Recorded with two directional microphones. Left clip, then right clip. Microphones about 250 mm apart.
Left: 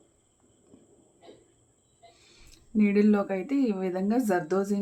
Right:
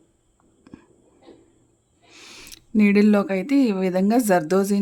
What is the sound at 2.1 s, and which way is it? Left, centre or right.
Speech, right.